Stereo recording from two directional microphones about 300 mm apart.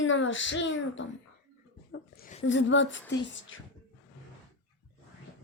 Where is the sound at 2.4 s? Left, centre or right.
Left.